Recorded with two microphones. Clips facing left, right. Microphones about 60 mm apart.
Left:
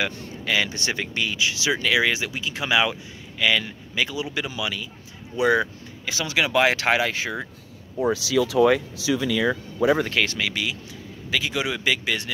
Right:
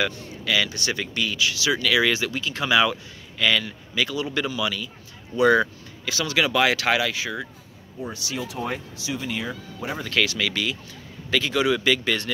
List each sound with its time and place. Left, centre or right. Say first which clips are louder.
0.1 s speech: even; left
8.0 s speech: left 10 dB; left
10.0 s speech: even; left
10.4 s speech: right 1 dB; centre